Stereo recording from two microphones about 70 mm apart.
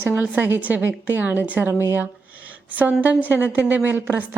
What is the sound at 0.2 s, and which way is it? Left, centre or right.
A woman's voice, right.